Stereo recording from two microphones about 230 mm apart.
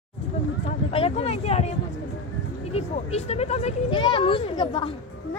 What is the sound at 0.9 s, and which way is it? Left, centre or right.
Speech, left.